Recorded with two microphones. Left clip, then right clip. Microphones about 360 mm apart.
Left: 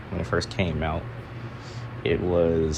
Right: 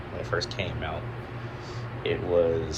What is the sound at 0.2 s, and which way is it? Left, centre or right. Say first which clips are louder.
Speech: left 3 dB; centre.